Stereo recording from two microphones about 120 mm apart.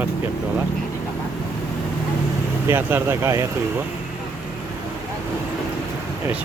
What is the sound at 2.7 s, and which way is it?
Speech, 15° right (ahead or behind).